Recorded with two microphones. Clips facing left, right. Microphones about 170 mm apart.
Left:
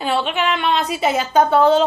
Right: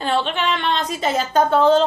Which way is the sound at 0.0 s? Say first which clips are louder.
Left 1 dB; 5° left (ahead or behind).